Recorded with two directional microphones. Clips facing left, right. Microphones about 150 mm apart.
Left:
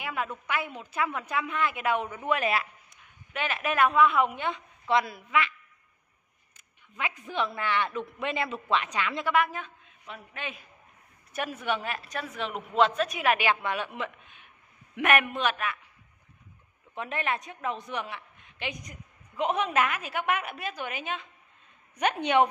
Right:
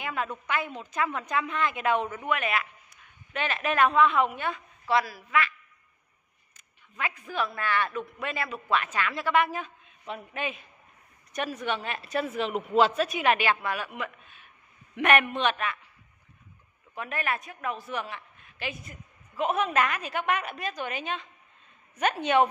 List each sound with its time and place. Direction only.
0.0 s a sound: 10° left (ahead or behind)
0.5 s a woman's voice: 10° left (ahead or behind)
2.2 s speech: 30° left (ahead or behind)
3.3 s a woman's voice: 10° left (ahead or behind)
6.5 s a woman's voice: 15° left (ahead or behind)
9.3 s a woman's voice: centre (ahead or behind)
10.0 s a woman's voice: 20° right (ahead or behind)
11.3 s a woman's voice: 10° left (ahead or behind)
13.4 s a woman's voice: 20° left (ahead or behind)
15.0 s a woman's voice: 5° left (ahead or behind)
16.9 s a woman's voice: 25° left (ahead or behind)